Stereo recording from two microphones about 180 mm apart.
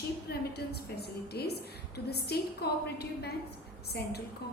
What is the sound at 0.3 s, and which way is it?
A woman's voice, 65° left (ahead or behind).